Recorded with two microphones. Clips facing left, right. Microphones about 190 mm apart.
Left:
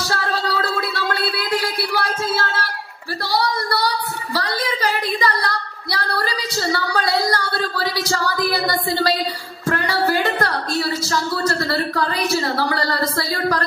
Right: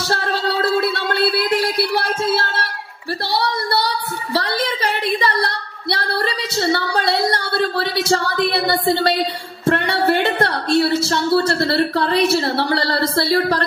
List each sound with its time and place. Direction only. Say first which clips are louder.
0.1 s music: right 3 dB; 25° right (ahead or behind)
3.3 s a sound: left 1 dB; 25° right (ahead or behind)
9.7 s music: right 3 dB; 25° right (ahead or behind)
12.5 s speech: right 2 dB; 30° right (ahead or behind)